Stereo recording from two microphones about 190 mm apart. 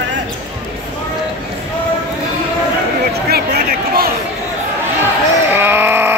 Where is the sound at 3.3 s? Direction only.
55° right (ahead or behind).